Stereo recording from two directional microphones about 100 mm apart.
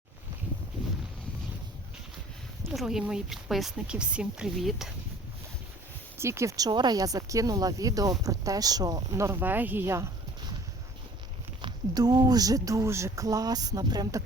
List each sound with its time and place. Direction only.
2.6 s speech: 5° right (ahead or behind)
6.1 s speech: 25° right (ahead or behind)
6.7 s speech: 45° right (ahead or behind); by 10.1 s 25° right (ahead or behind)
11.6 s speech: 45° right (ahead or behind)